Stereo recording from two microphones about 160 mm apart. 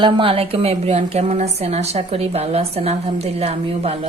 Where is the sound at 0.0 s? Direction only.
35° right (ahead or behind).